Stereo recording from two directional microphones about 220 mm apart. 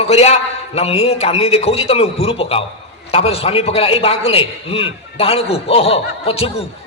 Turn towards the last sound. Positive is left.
turn(degrees=25)  # may be behind; listen again after turning